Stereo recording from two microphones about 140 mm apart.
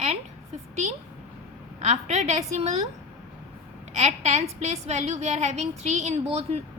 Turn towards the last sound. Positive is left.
turn(degrees=-50)  # may be behind; listen again after turning